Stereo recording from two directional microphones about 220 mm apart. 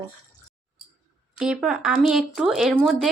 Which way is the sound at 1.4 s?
5° right (ahead or behind).